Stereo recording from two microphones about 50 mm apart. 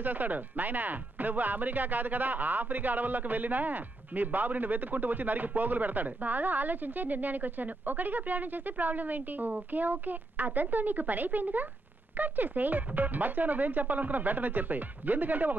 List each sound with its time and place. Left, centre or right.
0.0 s speech: right